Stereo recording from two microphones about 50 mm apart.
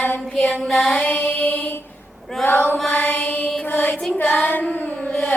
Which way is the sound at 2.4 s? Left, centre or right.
Left.